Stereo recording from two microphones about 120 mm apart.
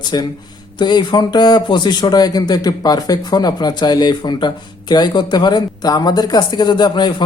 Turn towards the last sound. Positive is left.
turn(degrees=40)  # may be behind; listen again after turning